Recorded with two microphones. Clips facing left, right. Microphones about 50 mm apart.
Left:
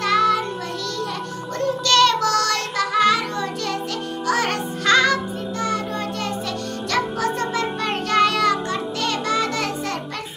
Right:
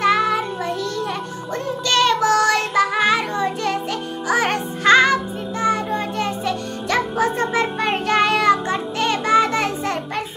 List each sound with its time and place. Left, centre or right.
0.0 s child singing: centre
1.9 s child singing: centre
4.3 s music: right
6.9 s music: right